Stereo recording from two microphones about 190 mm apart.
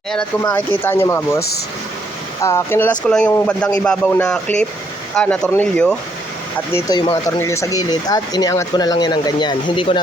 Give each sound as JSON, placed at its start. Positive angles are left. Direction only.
{"t": 0.5, "sound": "speech", "side_deg": 10}
{"t": 6.7, "sound": "speech", "side_deg": 20}